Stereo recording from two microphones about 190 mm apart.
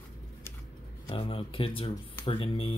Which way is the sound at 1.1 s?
25° left (ahead or behind).